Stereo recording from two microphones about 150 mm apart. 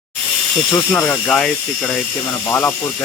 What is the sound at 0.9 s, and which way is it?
Speech, 15° left (ahead or behind).